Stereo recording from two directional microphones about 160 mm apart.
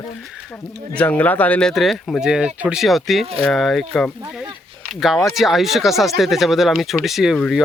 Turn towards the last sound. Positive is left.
turn(degrees=0)  # may be behind; listen again after turning